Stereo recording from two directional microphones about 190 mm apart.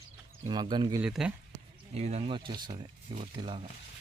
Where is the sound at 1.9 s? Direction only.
35° right (ahead or behind).